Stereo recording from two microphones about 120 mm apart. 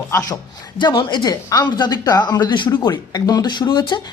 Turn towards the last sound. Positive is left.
turn(degrees=40)  # may be behind; listen again after turning